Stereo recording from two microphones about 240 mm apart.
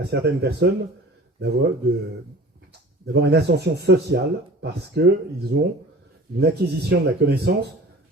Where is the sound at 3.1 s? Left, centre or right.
Right.